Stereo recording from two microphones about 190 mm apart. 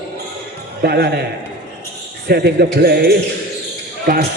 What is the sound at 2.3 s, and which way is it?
Speech, 60° right (ahead or behind).